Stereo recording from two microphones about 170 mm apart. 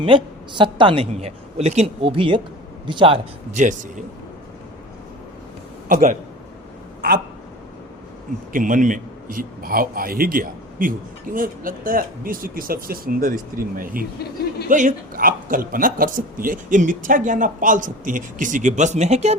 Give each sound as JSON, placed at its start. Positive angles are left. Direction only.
{"t": 0.0, "sound": "a woman's voice", "side_deg": -30}
{"t": 3.5, "sound": "speech", "side_deg": -45}
{"t": 5.9, "sound": "speech", "side_deg": -50}
{"t": 8.5, "sound": "a man's voice", "side_deg": -50}